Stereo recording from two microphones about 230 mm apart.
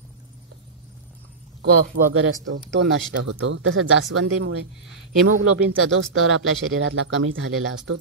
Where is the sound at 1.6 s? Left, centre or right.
Right.